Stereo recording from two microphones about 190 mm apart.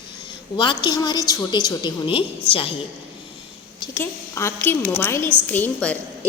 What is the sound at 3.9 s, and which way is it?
A woman's voice, 15° left (ahead or behind).